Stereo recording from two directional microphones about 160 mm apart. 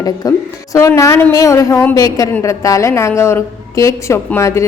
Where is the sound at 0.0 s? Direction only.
20° left (ahead or behind).